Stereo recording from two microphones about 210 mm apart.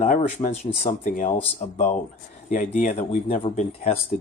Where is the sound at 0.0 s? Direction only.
35° left (ahead or behind).